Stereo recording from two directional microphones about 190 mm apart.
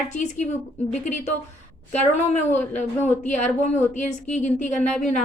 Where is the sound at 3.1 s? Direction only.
40° left (ahead or behind).